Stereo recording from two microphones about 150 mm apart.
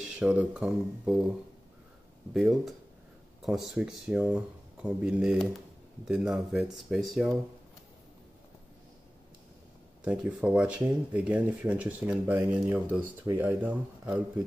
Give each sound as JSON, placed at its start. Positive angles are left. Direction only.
{"t": 0.2, "sound": "speech", "side_deg": -10}
{"t": 2.3, "sound": "speech", "side_deg": 0}
{"t": 10.0, "sound": "speech", "side_deg": -10}